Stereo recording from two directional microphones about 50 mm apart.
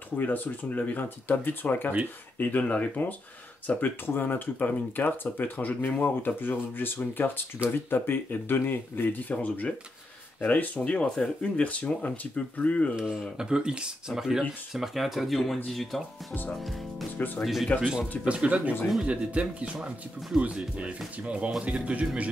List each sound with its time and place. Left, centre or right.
0.2 s speech: left
9.3 s speech: left
10.8 s speech: left
12.9 s speech: centre
17.2 s speech: left
17.7 s speech: centre